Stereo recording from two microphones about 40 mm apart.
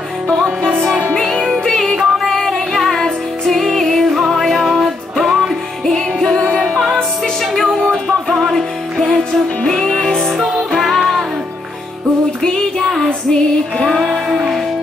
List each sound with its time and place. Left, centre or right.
1.5 s music: centre
2.0 s music: centre
5.9 s music: centre
6.5 s music: left
7.5 s music: centre
12.4 s female singing: centre